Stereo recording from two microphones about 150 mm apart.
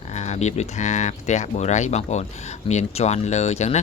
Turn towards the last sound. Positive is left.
turn(degrees=45)  # may be behind; listen again after turning